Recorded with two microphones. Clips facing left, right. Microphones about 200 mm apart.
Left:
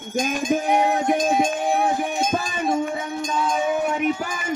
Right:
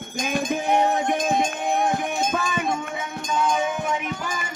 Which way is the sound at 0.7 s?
10° left (ahead or behind).